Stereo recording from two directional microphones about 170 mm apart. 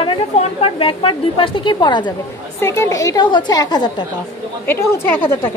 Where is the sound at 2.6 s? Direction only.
15° left (ahead or behind).